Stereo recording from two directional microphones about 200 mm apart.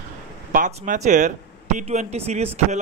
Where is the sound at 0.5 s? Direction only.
40° right (ahead or behind).